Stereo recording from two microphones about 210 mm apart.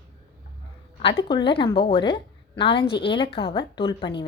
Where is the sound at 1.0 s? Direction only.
25° left (ahead or behind).